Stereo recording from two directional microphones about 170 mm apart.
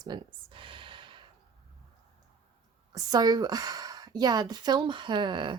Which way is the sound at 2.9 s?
25° right (ahead or behind).